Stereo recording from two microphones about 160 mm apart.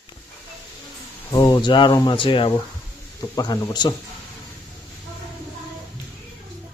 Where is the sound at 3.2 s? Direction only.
20° left (ahead or behind).